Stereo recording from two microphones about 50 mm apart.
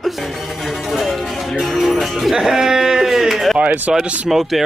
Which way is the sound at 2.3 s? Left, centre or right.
Centre.